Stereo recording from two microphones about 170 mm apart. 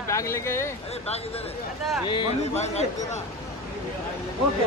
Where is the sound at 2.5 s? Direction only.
40° left (ahead or behind).